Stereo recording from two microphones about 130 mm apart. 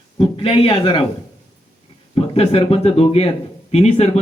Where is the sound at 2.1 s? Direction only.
50° left (ahead or behind).